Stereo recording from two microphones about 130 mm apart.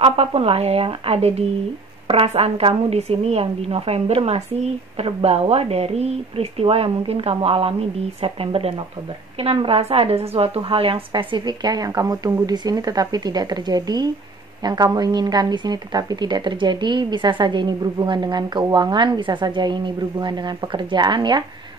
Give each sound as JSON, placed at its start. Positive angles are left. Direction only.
{"t": 0.0, "sound": "a woman's voice", "side_deg": -50}